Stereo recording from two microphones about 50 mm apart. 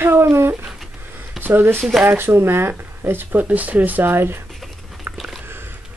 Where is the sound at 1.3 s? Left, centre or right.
Right.